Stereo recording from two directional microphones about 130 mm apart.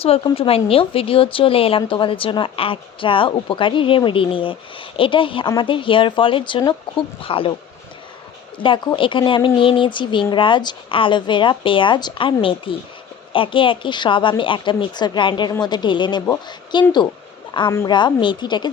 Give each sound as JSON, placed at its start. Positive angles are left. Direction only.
{"t": 0.3, "sound": "a woman's voice", "side_deg": 45}
{"t": 8.5, "sound": "speech", "side_deg": 40}